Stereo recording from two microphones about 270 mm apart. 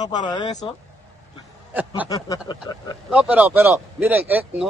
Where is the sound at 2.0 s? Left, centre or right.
Centre.